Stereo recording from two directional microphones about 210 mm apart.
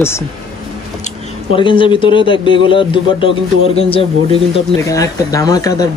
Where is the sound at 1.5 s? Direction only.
25° left (ahead or behind).